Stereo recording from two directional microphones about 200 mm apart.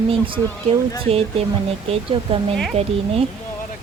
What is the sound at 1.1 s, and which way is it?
Speech, 30° right (ahead or behind).